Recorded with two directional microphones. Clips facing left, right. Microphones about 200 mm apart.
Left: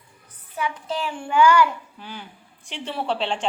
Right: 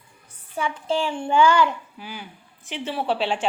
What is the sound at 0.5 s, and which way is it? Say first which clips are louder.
A child's voice: right 3 dB; 30° right (ahead or behind).